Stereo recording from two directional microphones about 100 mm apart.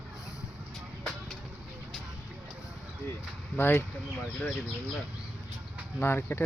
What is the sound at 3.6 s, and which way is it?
Speech, 20° left (ahead or behind).